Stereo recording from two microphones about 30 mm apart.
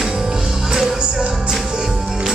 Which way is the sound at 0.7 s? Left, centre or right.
Centre.